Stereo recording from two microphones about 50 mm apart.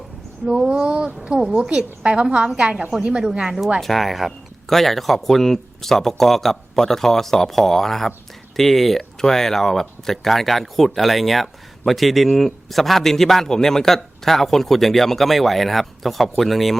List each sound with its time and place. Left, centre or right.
0.4 s speech: centre
3.8 s a man's voice: centre